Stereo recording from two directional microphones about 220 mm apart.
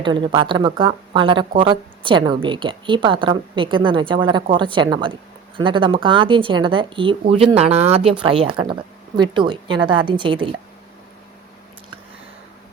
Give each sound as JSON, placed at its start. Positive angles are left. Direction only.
{"t": 0.0, "sound": "speech", "side_deg": -20}